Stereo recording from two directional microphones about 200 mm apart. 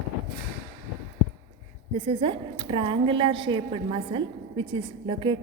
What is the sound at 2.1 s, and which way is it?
A woman's voice, 25° right (ahead or behind).